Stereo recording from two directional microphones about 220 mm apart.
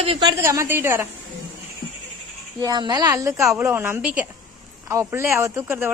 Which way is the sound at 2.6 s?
20° right (ahead or behind).